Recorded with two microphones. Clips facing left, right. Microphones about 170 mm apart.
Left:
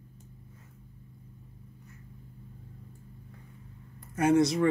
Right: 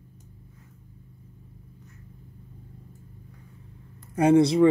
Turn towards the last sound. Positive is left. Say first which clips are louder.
# right 6 dB
turn(degrees=-30)  # may be behind; listen again after turning